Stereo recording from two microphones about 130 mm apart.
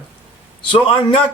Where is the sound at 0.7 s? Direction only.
40° left (ahead or behind).